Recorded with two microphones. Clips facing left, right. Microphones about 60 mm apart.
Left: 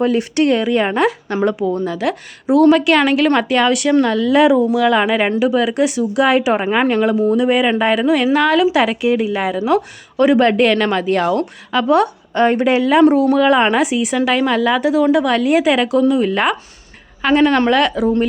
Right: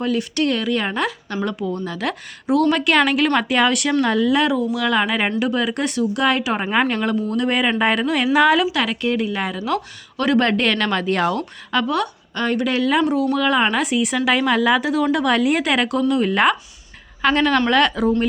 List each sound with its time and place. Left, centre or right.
0.0 s speech: left
1.7 s speech: centre
4.8 s speech: centre
8.6 s speech: centre
9.6 s speech: centre
10.4 s speech: centre
11.9 s speech: left
13.1 s speech: left
13.3 s speech: centre